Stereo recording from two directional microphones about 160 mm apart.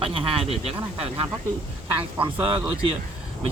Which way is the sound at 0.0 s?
35° right (ahead or behind).